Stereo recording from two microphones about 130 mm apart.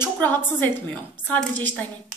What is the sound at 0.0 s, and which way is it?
A woman's voice, 15° left (ahead or behind).